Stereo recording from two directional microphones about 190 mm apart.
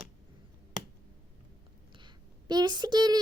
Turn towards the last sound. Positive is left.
turn(degrees=-20)  # may be behind; listen again after turning